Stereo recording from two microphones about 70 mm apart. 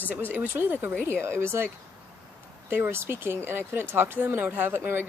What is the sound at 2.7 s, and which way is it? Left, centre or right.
Speech, right.